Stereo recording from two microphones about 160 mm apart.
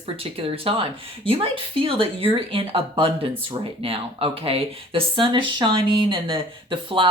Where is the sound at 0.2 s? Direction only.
35° right (ahead or behind).